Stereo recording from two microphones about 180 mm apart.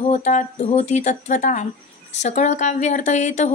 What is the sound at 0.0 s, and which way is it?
Speech, 40° left (ahead or behind).